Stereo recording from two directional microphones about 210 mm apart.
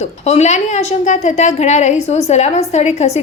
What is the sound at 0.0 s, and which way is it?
A woman's voice, 30° left (ahead or behind).